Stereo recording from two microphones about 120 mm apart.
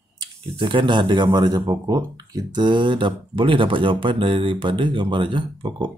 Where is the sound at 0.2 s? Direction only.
45° right (ahead or behind).